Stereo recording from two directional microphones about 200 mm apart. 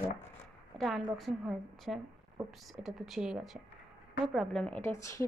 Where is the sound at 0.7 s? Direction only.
Centre (ahead or behind).